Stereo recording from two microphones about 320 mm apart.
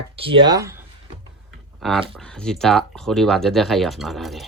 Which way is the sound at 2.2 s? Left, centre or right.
Centre.